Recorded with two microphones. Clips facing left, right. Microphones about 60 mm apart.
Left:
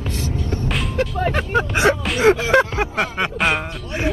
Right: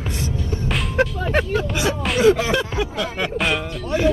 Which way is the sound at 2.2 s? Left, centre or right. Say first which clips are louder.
Left 2 dB; left.